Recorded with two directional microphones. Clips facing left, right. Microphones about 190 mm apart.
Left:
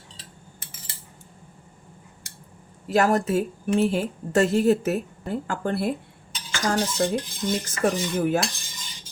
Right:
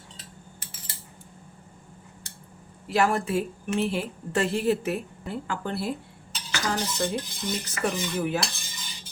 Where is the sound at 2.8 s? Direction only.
45° left (ahead or behind).